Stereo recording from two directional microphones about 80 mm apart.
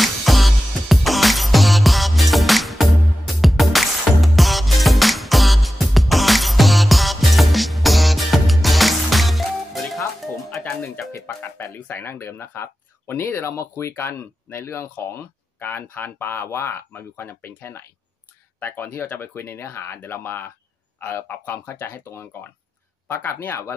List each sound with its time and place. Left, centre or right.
0.0 s music: centre
11.0 s music: left
11.9 s speech: left